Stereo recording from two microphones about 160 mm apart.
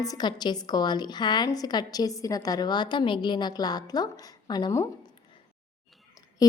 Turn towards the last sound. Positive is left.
turn(degrees=25)  # may be behind; listen again after turning